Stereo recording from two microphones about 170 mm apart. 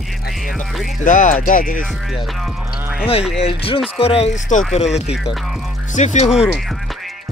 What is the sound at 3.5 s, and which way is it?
Speech, 30° left (ahead or behind).